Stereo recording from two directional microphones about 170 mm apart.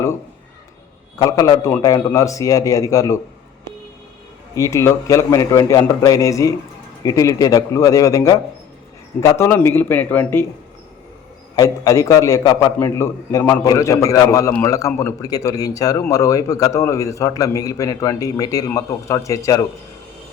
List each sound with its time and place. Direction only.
1.2 s a man's voice: 20° left (ahead or behind)
4.5 s a man's voice: 20° left (ahead or behind)
11.5 s a man's voice: 20° left (ahead or behind)